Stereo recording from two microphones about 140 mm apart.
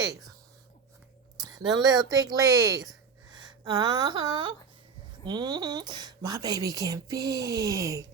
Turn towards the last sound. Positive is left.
turn(degrees=-25)  # may be behind; listen again after turning